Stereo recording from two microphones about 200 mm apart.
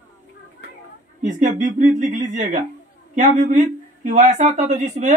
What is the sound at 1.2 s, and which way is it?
Speech, 40° right (ahead or behind).